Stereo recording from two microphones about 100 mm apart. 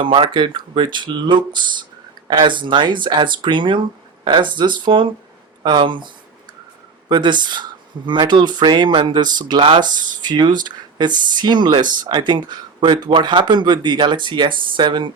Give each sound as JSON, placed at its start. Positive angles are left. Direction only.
{"t": 0.0, "sound": "speech", "side_deg": -60}
{"t": 7.1, "sound": "speech", "side_deg": -50}